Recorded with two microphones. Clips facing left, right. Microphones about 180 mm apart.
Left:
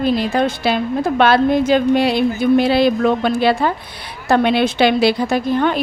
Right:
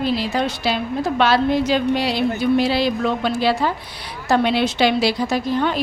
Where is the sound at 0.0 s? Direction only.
50° left (ahead or behind).